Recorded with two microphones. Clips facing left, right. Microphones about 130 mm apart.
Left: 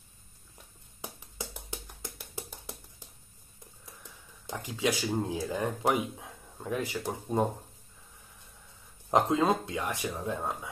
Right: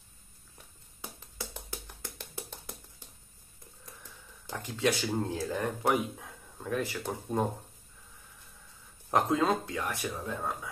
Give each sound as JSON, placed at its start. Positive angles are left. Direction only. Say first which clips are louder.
{"t": 1.5, "sound": "music", "louder": "left 1 dB", "side_deg": 15}
{"t": 4.5, "sound": "speech", "louder": "right 1 dB", "side_deg": 15}
{"t": 9.1, "sound": "speech", "louder": "left 2 dB", "side_deg": 20}